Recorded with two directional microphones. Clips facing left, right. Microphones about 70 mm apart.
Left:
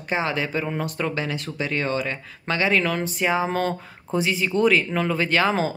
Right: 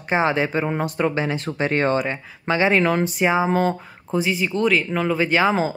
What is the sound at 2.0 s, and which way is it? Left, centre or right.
Speech, right.